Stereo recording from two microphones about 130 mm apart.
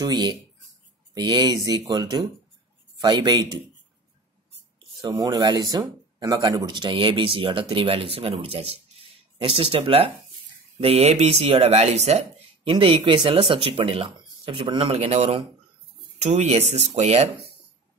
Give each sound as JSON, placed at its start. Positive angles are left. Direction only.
{"t": 1.1, "sound": "speech", "side_deg": -35}
{"t": 5.2, "sound": "speech", "side_deg": -25}